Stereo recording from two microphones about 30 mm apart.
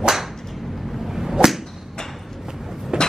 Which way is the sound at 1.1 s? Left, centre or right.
Centre.